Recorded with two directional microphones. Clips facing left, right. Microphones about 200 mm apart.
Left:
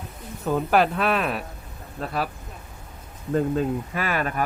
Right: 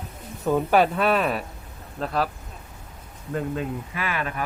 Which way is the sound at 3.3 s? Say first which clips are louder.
Left 5 dB; 40° left (ahead or behind).